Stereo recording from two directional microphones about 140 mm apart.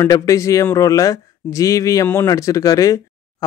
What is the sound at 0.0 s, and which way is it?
Speech, 25° left (ahead or behind).